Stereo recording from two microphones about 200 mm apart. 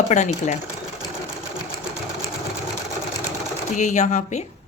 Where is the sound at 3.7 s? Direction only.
35° left (ahead or behind).